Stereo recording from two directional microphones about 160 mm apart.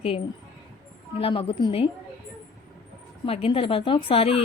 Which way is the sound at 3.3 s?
35° left (ahead or behind).